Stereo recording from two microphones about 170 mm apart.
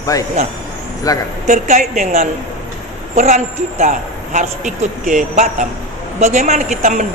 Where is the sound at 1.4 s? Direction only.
45° right (ahead or behind).